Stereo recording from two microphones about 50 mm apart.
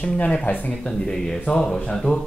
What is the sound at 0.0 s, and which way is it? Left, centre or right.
Speech, left.